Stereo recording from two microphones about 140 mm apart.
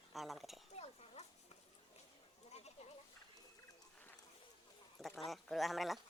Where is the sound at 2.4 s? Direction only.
50° left (ahead or behind).